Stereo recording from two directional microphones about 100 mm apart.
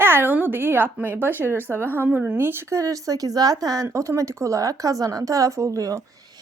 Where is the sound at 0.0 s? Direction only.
20° right (ahead or behind).